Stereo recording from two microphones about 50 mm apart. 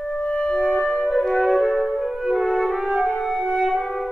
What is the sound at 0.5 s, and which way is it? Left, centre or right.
Music, centre.